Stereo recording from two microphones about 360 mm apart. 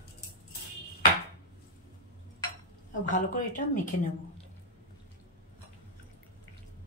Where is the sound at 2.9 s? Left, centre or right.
Left.